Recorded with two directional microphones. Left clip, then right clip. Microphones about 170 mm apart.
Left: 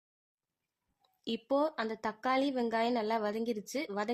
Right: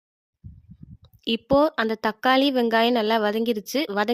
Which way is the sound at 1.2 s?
40° right (ahead or behind).